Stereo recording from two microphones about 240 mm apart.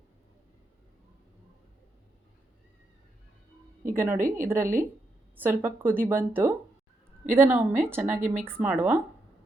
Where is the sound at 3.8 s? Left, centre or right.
Right.